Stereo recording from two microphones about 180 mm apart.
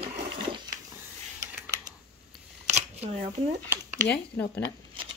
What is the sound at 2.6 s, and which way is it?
Shuffling cards, 40° right (ahead or behind).